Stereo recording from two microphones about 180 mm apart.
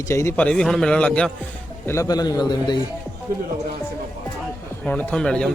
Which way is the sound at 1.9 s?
20° left (ahead or behind).